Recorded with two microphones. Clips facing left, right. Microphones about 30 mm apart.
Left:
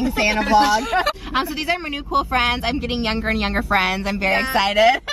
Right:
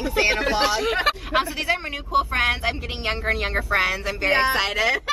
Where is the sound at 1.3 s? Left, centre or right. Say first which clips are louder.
Left 1 dB; centre.